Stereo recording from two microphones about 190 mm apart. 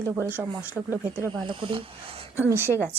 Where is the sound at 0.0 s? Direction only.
10° right (ahead or behind).